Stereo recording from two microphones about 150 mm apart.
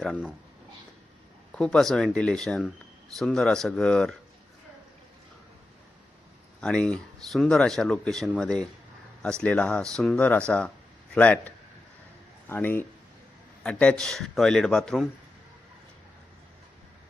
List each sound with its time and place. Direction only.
0.0 s speech: centre (ahead or behind)
1.5 s speech: 5° left (ahead or behind)
6.6 s speech: 5° left (ahead or behind)